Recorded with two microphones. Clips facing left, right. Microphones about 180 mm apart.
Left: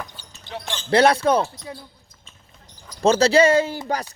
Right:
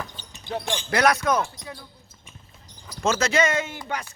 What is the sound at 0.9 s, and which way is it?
Speech, 30° left (ahead or behind).